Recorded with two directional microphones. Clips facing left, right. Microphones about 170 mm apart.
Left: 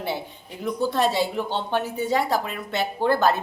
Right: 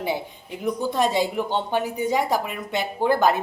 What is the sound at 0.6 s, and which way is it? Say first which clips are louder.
A woman's voice: even; 15° right (ahead or behind).